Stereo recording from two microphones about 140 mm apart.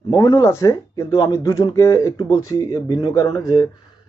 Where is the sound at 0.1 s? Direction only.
25° left (ahead or behind).